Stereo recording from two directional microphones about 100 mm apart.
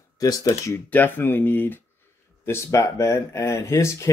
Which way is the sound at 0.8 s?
15° left (ahead or behind).